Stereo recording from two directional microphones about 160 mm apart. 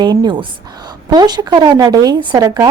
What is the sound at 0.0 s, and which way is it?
Speech, 25° right (ahead or behind).